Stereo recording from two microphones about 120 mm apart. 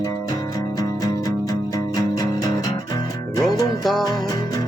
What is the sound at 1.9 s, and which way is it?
Music, 30° left (ahead or behind).